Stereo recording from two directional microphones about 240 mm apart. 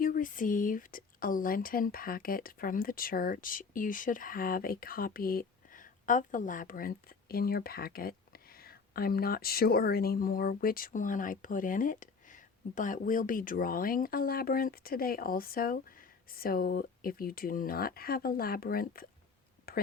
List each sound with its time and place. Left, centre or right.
0.0 s speech: left